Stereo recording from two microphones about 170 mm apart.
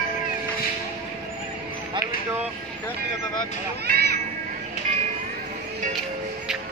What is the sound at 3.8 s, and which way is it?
Speech, 70° right (ahead or behind).